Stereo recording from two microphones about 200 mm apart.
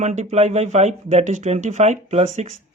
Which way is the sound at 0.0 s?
35° right (ahead or behind).